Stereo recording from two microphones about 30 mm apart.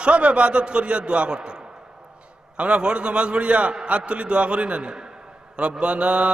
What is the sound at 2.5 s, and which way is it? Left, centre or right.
A man's voice, right.